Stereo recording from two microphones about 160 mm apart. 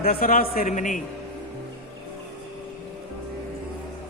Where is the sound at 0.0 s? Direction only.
65° left (ahead or behind).